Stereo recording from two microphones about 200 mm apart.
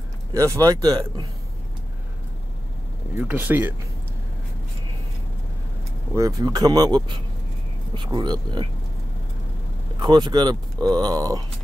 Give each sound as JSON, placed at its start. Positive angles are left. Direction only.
{"t": 0.3, "sound": "speech", "side_deg": -15}
{"t": 3.2, "sound": "speech", "side_deg": -10}
{"t": 6.1, "sound": "speech", "side_deg": -20}
{"t": 9.9, "sound": "speech", "side_deg": -20}